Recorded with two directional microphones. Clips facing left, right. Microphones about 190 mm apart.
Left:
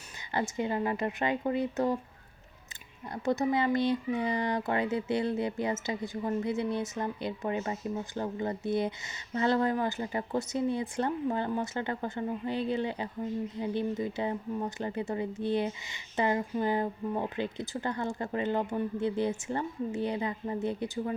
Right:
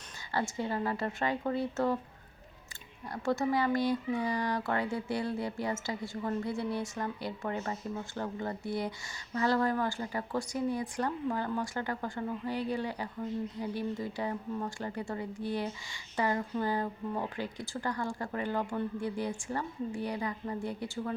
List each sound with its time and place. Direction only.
0.3 s speech: 20° left (ahead or behind)
3.1 s speech: 20° left (ahead or behind)